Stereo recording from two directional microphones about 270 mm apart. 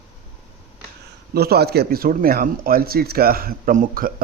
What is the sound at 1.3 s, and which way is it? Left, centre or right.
Speech, right.